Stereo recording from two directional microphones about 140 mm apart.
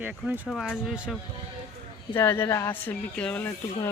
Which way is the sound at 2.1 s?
20° left (ahead or behind).